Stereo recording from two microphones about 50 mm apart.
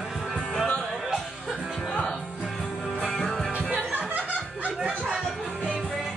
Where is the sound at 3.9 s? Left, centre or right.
Right.